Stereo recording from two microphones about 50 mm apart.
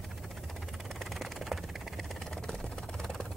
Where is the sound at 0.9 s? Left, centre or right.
Centre.